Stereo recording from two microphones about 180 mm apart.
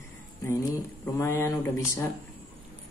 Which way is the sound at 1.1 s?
15° left (ahead or behind).